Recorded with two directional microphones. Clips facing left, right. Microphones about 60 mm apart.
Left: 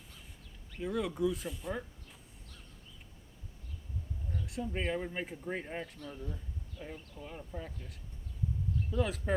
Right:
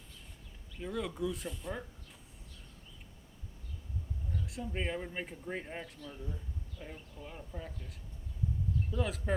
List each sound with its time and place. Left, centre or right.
0.8 s speech: centre
4.4 s speech: centre
6.0 s speech: left
6.8 s speech: centre
8.9 s speech: centre